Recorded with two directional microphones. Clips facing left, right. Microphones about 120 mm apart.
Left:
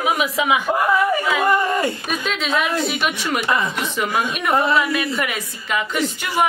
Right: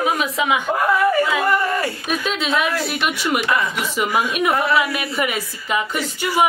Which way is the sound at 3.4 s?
25° left (ahead or behind).